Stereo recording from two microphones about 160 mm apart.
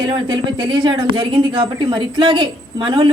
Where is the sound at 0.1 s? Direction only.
30° right (ahead or behind).